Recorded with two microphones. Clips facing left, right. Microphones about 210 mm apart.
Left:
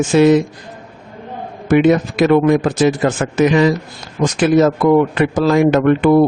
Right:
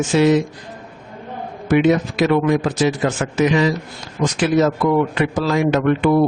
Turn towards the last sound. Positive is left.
turn(degrees=50)  # may be behind; listen again after turning